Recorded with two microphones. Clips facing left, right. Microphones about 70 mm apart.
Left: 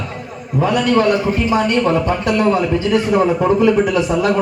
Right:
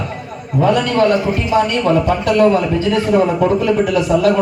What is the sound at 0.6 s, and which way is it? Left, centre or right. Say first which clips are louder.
A man's voice: right 1 dB; centre.